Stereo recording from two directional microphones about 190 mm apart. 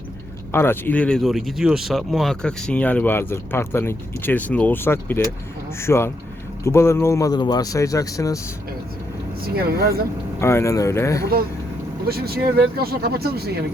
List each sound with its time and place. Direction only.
0.5 s speech: 10° left (ahead or behind)
9.6 s speech: 55° right (ahead or behind)
10.4 s speech: 15° left (ahead or behind)
12.0 s speech: 55° right (ahead or behind)